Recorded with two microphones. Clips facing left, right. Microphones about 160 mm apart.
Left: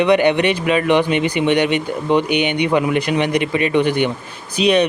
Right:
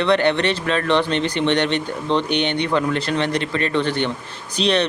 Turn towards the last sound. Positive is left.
turn(degrees=10)  # may be behind; listen again after turning